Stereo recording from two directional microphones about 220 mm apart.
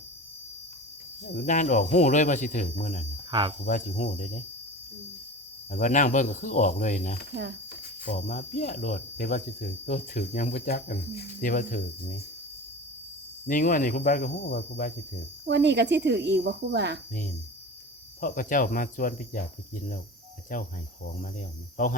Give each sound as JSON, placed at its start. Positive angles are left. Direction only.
{"t": 1.4, "sound": "cricket", "side_deg": 35}
{"t": 3.3, "sound": "speech", "side_deg": -20}
{"t": 3.7, "sound": "cricket", "side_deg": 40}
{"t": 5.7, "sound": "cricket", "side_deg": 35}
{"t": 13.5, "sound": "cricket", "side_deg": 35}
{"t": 15.4, "sound": "speech", "side_deg": -55}
{"t": 18.2, "sound": "cricket", "side_deg": 35}